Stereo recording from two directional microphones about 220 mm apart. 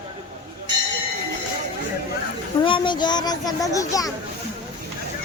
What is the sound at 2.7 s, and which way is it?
Speech, 20° left (ahead or behind).